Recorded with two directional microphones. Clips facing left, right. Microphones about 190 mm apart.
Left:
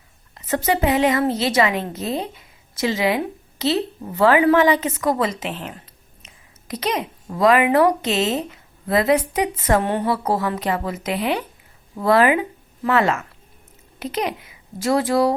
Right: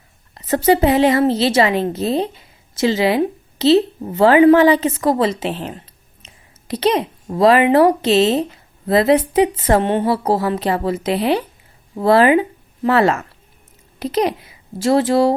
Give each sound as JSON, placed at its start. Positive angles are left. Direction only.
{"t": 0.3, "sound": "a woman's voice", "side_deg": -35}